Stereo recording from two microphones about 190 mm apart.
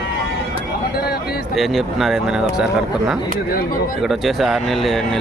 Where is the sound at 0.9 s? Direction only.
55° left (ahead or behind).